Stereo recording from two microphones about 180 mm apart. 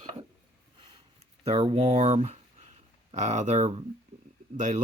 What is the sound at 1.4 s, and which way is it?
Speech, 35° right (ahead or behind).